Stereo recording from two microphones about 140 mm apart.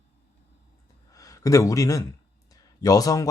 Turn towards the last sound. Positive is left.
turn(degrees=25)  # may be behind; listen again after turning